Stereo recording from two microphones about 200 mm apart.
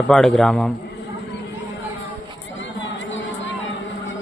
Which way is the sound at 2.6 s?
65° left (ahead or behind).